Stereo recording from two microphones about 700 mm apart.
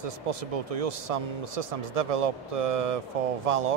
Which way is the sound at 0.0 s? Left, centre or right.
Right.